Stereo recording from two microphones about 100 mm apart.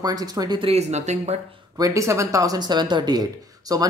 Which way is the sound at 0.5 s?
70° right (ahead or behind).